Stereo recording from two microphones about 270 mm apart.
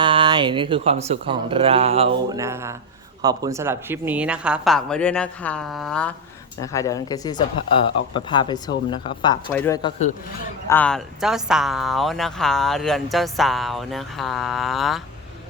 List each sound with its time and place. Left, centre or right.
0.0 s speech: centre
2.3 s speech: centre